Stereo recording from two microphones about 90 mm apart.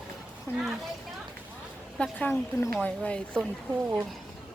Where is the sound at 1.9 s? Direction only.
10° left (ahead or behind).